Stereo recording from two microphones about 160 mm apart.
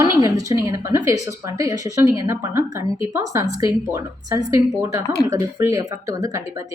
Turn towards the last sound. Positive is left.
turn(degrees=-20)  # may be behind; listen again after turning